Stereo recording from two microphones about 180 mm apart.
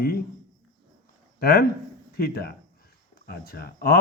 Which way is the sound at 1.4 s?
60° left (ahead or behind).